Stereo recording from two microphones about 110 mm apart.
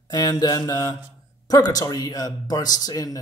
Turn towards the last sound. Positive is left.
turn(degrees=35)  # may be behind; listen again after turning